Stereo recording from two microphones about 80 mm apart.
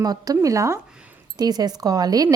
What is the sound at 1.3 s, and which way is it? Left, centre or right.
Speech, right.